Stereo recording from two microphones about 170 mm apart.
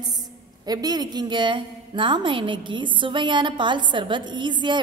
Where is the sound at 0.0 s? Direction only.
25° right (ahead or behind).